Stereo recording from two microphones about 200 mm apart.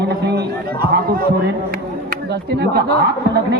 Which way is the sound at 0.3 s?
50° right (ahead or behind).